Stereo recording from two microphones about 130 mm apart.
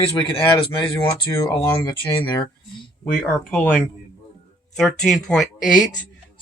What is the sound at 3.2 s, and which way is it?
Speech, 5° left (ahead or behind).